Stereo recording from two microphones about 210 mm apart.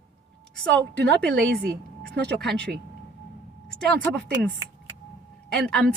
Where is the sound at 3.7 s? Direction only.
5° left (ahead or behind).